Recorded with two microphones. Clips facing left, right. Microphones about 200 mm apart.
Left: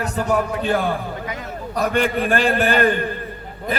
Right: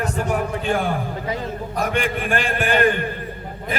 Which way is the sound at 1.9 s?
40° left (ahead or behind).